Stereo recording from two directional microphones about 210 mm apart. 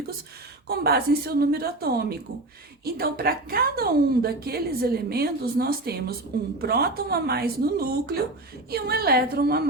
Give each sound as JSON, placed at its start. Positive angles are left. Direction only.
{"t": 0.7, "sound": "a woman's voice", "side_deg": -50}